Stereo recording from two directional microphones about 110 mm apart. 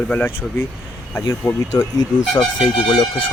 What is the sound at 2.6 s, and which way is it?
Speech, 50° left (ahead or behind).